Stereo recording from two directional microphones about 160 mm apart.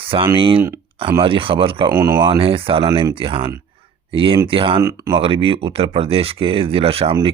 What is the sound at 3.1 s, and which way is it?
Speech, 35° right (ahead or behind).